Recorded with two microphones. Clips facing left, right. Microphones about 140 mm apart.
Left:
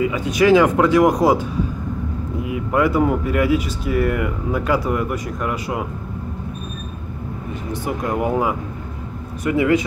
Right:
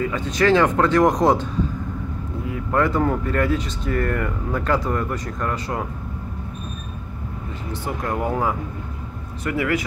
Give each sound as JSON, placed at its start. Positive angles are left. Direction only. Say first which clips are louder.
{"t": 0.0, "sound": "speech", "louder": "left 3 dB", "side_deg": 10}
{"t": 7.8, "sound": "speech", "louder": "left 3 dB", "side_deg": 15}